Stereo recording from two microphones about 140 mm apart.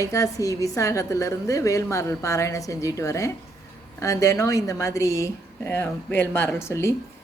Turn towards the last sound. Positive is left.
turn(degrees=20)  # may be behind; listen again after turning